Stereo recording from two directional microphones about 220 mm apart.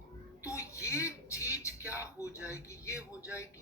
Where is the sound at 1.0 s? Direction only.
15° left (ahead or behind).